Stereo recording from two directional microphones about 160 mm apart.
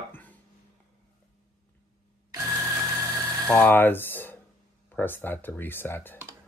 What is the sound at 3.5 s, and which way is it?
Speech, 10° left (ahead or behind).